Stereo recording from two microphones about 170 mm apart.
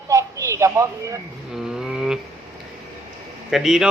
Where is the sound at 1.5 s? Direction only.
5° right (ahead or behind).